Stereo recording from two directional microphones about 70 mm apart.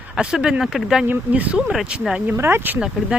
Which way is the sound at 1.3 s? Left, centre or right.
Centre.